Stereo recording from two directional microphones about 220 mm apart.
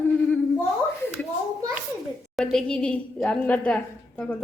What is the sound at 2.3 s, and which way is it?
Speech, centre (ahead or behind).